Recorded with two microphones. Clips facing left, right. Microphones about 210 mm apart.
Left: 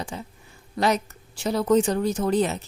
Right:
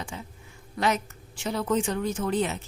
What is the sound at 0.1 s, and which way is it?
A woman's voice, 35° left (ahead or behind).